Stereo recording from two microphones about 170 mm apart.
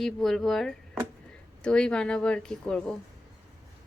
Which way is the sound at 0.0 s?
Centre (ahead or behind).